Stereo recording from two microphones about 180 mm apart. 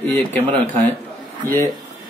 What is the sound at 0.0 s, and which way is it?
Speech, 10° left (ahead or behind).